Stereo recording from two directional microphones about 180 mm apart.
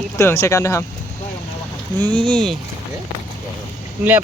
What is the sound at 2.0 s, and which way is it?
Speech, 5° left (ahead or behind).